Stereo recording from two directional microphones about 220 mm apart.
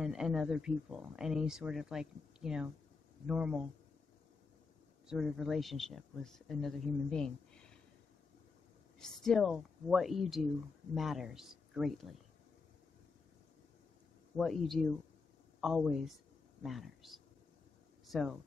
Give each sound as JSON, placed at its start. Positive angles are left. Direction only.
{"t": 0.0, "sound": "speech", "side_deg": -5}
{"t": 5.0, "sound": "speech", "side_deg": 0}
{"t": 9.2, "sound": "speech", "side_deg": 0}
{"t": 14.3, "sound": "speech", "side_deg": 0}